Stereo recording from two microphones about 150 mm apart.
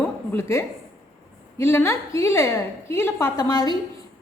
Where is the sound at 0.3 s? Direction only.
20° left (ahead or behind).